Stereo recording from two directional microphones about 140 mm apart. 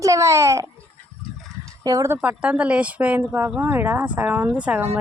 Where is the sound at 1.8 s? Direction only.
25° right (ahead or behind).